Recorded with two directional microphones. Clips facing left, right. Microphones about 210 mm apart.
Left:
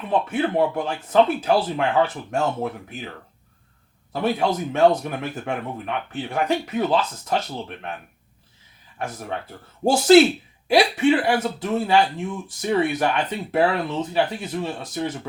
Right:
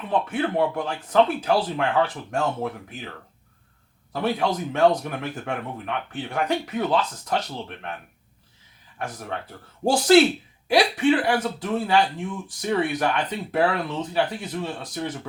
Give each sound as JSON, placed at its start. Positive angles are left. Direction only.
{"t": 0.1, "sound": "speech", "side_deg": 25}
{"t": 4.1, "sound": "speech", "side_deg": 25}
{"t": 9.8, "sound": "speech", "side_deg": 25}